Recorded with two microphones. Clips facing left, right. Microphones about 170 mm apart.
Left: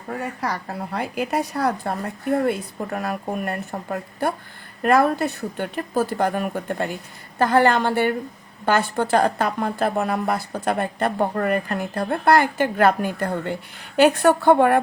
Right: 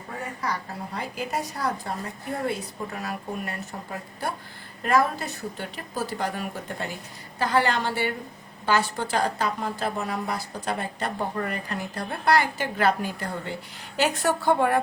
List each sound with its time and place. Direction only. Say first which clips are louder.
0.4 s a woman's voice: left 4 dB; 65° left (ahead or behind)